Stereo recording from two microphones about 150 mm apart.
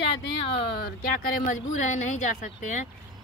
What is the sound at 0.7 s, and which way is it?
A woman's voice, 90° left.